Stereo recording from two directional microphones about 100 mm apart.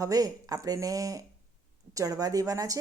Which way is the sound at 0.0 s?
35° right (ahead or behind).